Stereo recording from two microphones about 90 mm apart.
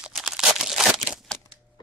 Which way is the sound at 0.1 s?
5° right (ahead or behind).